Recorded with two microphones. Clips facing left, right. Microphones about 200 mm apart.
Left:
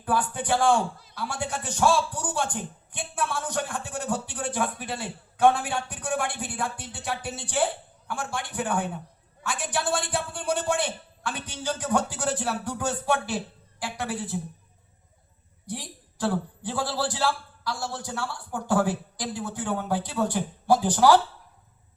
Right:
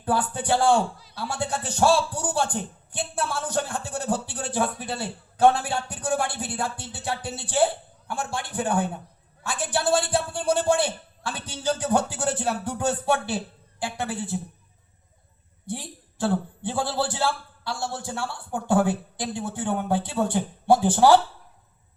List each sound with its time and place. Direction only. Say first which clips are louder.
0.0 s a man's voice: right 2 dB; 30° right (ahead or behind)
15.6 s a man's voice: right 2 dB; 25° right (ahead or behind)